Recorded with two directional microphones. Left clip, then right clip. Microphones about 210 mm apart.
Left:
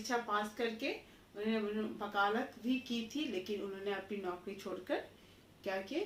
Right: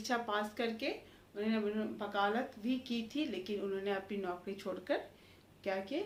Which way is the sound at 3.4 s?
20° right (ahead or behind).